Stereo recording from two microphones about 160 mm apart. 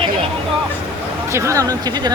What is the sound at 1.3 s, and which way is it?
Speech, 20° right (ahead or behind).